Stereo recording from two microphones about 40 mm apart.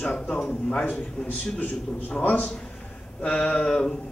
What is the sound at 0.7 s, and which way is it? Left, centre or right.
A man's voice, left.